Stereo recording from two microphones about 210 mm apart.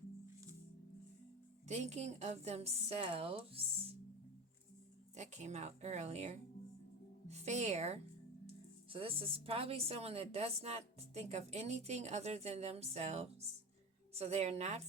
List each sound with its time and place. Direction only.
1.6 s a woman's voice: 35° right (ahead or behind)
5.1 s a woman's voice: 35° right (ahead or behind)